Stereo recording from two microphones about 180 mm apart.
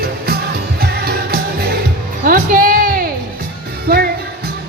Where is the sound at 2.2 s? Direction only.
50° right (ahead or behind).